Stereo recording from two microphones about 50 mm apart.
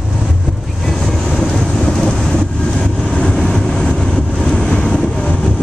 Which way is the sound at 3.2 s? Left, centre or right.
Centre.